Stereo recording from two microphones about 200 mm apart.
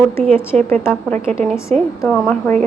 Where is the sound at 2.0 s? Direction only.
5° left (ahead or behind).